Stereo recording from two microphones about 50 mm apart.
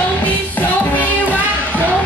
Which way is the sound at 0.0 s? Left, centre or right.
Left.